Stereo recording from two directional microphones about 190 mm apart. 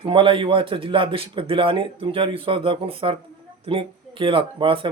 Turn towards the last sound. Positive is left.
turn(degrees=-25)  # may be behind; listen again after turning